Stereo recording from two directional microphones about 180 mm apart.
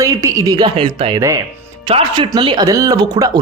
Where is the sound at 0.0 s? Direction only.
15° right (ahead or behind).